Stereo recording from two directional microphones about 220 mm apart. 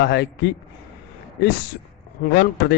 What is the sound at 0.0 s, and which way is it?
Speech, 50° left (ahead or behind).